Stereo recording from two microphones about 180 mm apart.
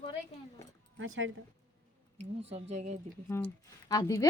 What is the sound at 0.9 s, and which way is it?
Speech, 90° right.